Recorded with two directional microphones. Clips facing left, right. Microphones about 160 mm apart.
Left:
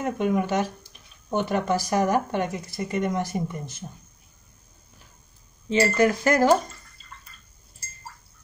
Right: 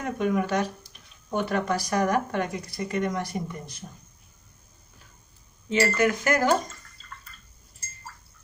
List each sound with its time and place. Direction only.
0.0 s speech: 25° left (ahead or behind)
5.7 s speech: 30° left (ahead or behind)